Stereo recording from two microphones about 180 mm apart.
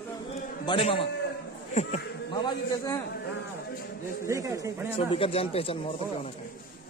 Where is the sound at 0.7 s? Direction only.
30° left (ahead or behind).